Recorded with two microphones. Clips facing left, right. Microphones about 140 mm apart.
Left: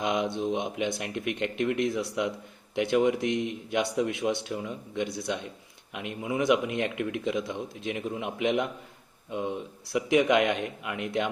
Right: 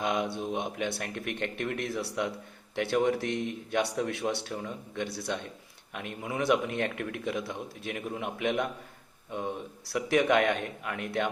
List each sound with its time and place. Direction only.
0.0 s a man's voice: 20° left (ahead or behind)
9.8 s a man's voice: 15° left (ahead or behind)